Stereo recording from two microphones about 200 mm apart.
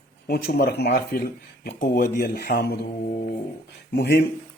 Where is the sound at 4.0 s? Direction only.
50° left (ahead or behind).